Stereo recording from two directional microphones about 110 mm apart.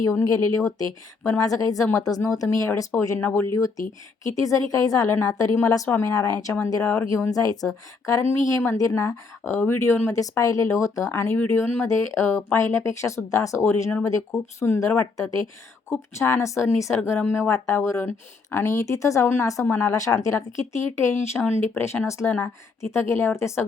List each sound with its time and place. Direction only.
0.1 s speech: 25° left (ahead or behind)